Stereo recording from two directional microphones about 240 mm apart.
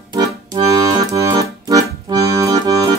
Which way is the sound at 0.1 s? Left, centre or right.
Centre.